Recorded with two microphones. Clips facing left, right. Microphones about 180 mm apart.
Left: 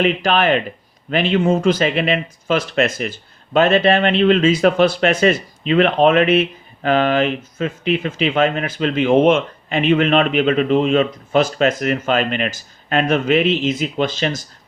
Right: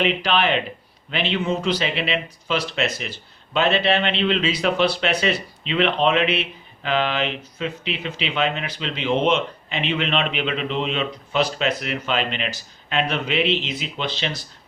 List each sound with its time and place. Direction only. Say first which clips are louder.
0.0 s speech: left 4 dB; 45° left (ahead or behind)